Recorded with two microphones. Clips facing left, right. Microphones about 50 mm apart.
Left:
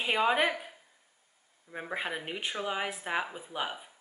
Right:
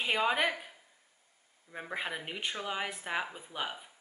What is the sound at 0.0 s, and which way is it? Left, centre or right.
A woman's voice, centre.